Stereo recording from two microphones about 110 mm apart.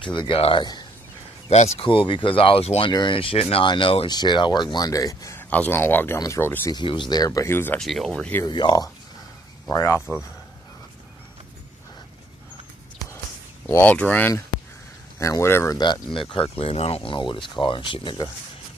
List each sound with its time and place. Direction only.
0.0 s speech: 45° left (ahead or behind)
1.5 s speech: 90° left
1.8 s speech: 50° left (ahead or behind)
2.9 s speech: 45° left (ahead or behind); by 3.6 s 60° left (ahead or behind)
3.6 s speech: 50° left (ahead or behind)
4.1 s speech: 40° left (ahead or behind)
5.4 s speech: 15° left (ahead or behind)
6.7 s speech: 45° left (ahead or behind); by 7.8 s 20° left (ahead or behind)
7.8 s speech: 5° left (ahead or behind)
8.5 s speech: 40° left (ahead or behind)
13.7 s speech: 15° left (ahead or behind)
15.1 s speech: 30° left (ahead or behind)
15.8 s speech: 45° left (ahead or behind)